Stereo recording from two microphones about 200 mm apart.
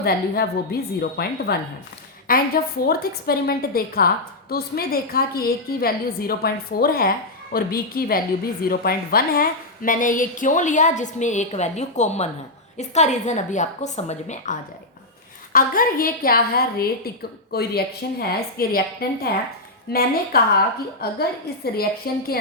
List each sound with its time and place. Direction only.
0.0 s a woman's voice: 50° left (ahead or behind); by 14.5 s 35° left (ahead or behind)
15.5 s a woman's voice: 45° left (ahead or behind)